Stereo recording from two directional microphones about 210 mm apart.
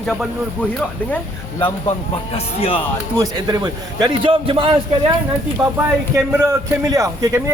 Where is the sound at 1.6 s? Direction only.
25° left (ahead or behind).